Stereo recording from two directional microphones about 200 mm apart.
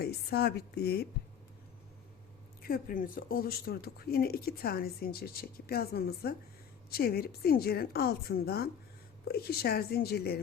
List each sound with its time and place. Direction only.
0.0 s a woman's voice: 50° left (ahead or behind)
2.6 s speech: 45° left (ahead or behind)